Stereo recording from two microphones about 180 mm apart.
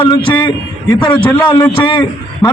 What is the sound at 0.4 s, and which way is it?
A man's voice, 20° left (ahead or behind).